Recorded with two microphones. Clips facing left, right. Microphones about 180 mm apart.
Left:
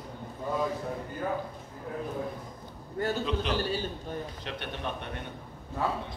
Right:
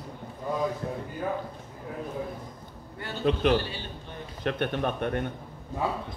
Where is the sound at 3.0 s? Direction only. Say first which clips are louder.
Left 9 dB; 45° left (ahead or behind).